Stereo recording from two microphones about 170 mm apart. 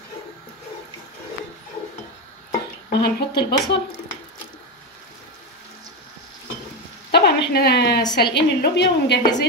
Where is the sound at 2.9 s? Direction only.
70° left (ahead or behind).